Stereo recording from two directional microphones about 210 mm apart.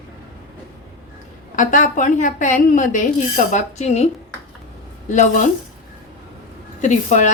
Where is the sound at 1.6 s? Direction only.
40° left (ahead or behind).